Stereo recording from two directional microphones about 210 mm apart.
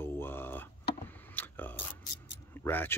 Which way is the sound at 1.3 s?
10° left (ahead or behind).